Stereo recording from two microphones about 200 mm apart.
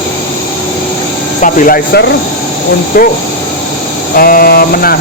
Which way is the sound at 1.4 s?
45° left (ahead or behind).